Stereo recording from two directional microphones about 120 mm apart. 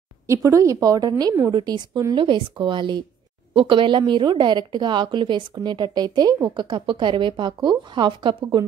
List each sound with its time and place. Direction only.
0.3 s a woman's voice: 25° right (ahead or behind)
2.1 s a woman's voice: 45° right (ahead or behind)